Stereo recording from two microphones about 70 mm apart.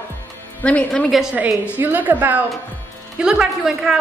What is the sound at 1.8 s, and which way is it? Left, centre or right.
Speech, right.